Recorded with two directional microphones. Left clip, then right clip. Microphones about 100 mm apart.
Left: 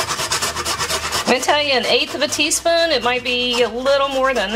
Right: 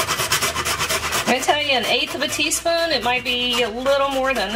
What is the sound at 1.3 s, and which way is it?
A woman's voice, 40° left (ahead or behind).